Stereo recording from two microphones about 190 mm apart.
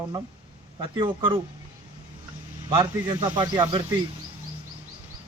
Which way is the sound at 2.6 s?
25° right (ahead or behind).